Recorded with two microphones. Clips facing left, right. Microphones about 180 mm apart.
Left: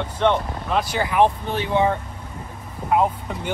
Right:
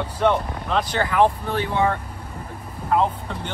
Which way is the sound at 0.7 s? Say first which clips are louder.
Even; 10° left (ahead or behind).